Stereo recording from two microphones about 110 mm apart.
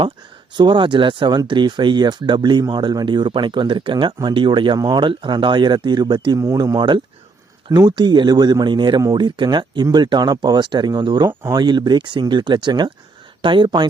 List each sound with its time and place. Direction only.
0.5 s speech: 45° right (ahead or behind)